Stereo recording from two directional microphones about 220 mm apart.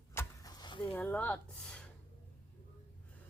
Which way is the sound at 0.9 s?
5° left (ahead or behind).